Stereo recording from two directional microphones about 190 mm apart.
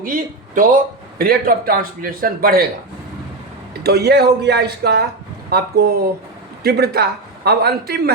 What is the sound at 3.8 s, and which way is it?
A man's voice, 60° right (ahead or behind).